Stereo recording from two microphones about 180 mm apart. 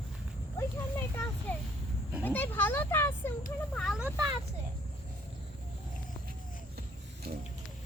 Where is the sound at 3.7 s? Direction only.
Centre (ahead or behind).